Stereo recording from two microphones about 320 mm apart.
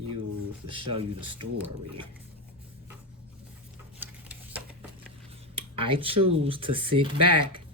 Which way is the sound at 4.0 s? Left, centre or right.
Centre.